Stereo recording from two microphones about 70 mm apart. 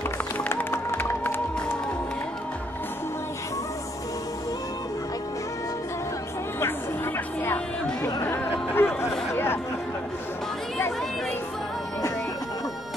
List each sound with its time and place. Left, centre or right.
0.5 s music: left
8.3 s a sound: left
9.3 s chatter: left